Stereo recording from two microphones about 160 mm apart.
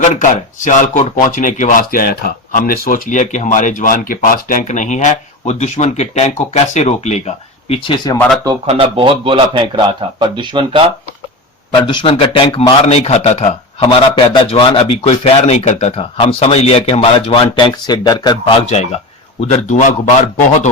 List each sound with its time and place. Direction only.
0.2 s speech: 50° left (ahead or behind); by 8.2 s 25° left (ahead or behind)
8.6 s speech: 40° right (ahead or behind)
11.7 s a man's voice: 30° left (ahead or behind); by 13.8 s 45° left (ahead or behind)
13.8 s a man's voice: 30° left (ahead or behind)
18.7 s speech: 40° left (ahead or behind)